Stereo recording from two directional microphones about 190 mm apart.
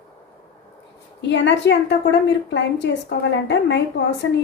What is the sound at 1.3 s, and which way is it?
A woman's voice, 70° left (ahead or behind).